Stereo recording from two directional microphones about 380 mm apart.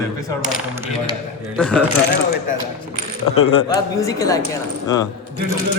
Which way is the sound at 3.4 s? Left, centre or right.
Centre.